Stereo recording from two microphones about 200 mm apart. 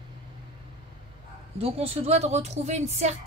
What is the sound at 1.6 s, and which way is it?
Speech, 30° right (ahead or behind).